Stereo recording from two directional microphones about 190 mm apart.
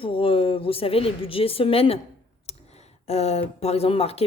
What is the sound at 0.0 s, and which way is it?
A woman's voice, 30° left (ahead or behind).